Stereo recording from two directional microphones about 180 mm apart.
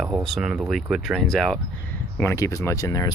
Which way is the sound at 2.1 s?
15° left (ahead or behind).